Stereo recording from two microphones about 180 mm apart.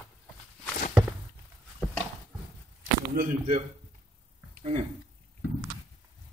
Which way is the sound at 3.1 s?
55° right (ahead or behind).